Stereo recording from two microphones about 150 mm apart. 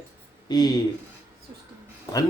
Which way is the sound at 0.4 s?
25° left (ahead or behind).